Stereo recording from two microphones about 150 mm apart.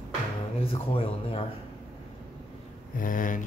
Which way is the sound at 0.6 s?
40° left (ahead or behind).